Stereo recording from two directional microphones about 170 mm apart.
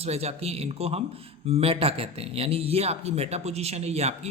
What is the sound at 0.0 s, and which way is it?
Speech, 35° right (ahead or behind).